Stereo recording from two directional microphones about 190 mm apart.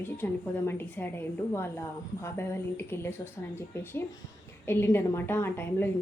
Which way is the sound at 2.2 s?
15° left (ahead or behind).